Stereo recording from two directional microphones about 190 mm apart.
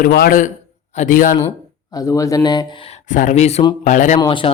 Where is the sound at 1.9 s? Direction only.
15° left (ahead or behind); by 4.2 s 40° left (ahead or behind).